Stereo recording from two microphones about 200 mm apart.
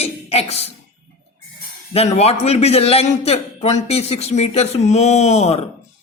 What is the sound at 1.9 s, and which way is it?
A man's voice, 30° left (ahead or behind).